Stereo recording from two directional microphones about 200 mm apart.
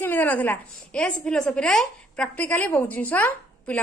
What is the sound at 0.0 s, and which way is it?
A woman's voice, 10° left (ahead or behind).